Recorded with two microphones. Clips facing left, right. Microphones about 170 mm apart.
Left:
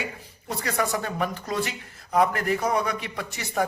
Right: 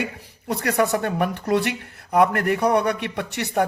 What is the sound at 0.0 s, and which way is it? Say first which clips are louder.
A man's voice: right 5 dB; 65° right (ahead or behind).